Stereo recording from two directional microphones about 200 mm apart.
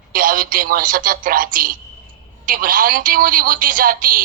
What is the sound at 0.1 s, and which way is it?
A woman's voice, 45° right (ahead or behind).